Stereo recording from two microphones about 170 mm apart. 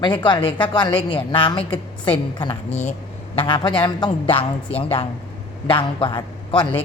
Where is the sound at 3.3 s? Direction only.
30° left (ahead or behind).